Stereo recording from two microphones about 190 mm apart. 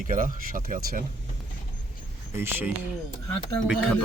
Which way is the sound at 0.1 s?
45° right (ahead or behind).